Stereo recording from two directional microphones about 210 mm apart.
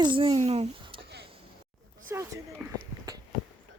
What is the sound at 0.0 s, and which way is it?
A child's voice, 25° right (ahead or behind).